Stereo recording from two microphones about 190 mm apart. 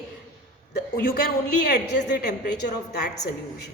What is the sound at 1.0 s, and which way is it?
A woman's voice, 50° left (ahead or behind).